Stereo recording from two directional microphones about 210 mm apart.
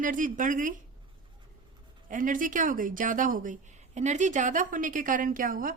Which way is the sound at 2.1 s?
40° right (ahead or behind).